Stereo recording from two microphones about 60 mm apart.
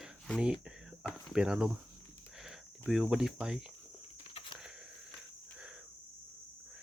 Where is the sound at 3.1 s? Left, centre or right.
Centre.